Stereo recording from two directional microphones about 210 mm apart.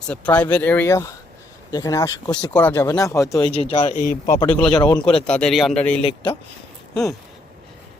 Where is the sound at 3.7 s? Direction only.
25° left (ahead or behind).